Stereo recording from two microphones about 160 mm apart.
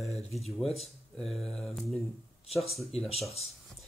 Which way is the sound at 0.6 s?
40° left (ahead or behind).